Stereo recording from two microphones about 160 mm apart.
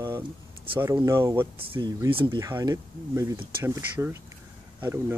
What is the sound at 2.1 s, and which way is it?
Speech, 35° right (ahead or behind).